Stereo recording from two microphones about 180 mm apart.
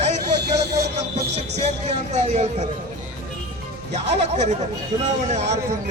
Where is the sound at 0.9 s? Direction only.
35° right (ahead or behind).